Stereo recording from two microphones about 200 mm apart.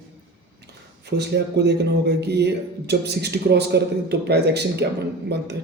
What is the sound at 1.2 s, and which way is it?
Speech, 55° right (ahead or behind).